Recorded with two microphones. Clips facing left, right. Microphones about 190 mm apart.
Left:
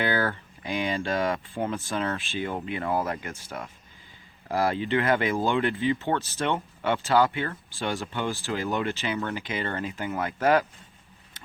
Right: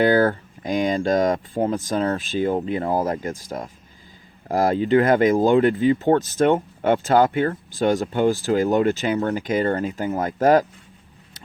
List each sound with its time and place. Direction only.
0.0 s speech: 40° right (ahead or behind)